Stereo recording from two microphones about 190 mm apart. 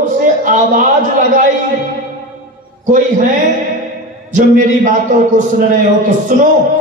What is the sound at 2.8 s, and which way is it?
Speech, 40° right (ahead or behind).